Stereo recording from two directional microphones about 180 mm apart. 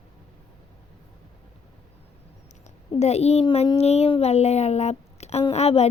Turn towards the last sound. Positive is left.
turn(degrees=35)  # may be behind; listen again after turning